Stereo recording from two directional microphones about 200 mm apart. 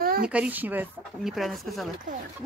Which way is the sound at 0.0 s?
50° right (ahead or behind).